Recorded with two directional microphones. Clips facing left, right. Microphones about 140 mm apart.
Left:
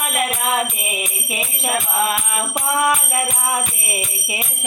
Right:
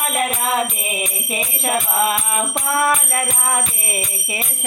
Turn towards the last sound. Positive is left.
turn(degrees=10)  # may be behind; listen again after turning